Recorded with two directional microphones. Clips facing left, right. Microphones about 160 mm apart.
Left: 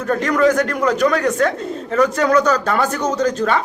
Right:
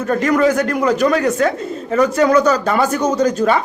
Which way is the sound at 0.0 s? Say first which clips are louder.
Right 1 dB; 5° right (ahead or behind).